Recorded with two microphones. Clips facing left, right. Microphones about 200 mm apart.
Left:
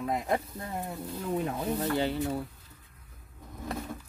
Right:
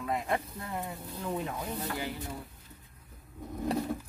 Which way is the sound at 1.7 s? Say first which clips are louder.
Left 7 dB; 65° left (ahead or behind).